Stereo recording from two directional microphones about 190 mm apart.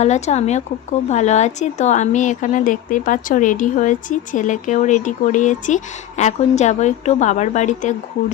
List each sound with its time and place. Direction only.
0.0 s a woman's voice: 35° left (ahead or behind)